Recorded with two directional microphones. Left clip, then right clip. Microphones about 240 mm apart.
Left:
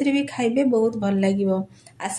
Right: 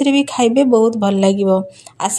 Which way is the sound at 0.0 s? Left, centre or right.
Right.